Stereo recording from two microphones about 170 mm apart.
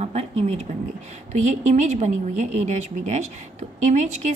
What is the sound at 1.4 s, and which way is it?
A woman's voice, 45° right (ahead or behind).